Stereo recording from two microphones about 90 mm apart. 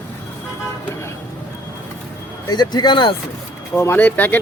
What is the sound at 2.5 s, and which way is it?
Speech, 50° left (ahead or behind).